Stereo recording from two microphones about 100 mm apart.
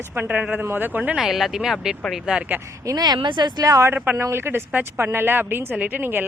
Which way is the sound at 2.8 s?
40° right (ahead or behind).